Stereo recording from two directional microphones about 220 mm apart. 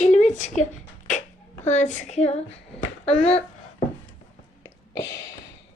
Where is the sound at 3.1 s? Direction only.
30° left (ahead or behind).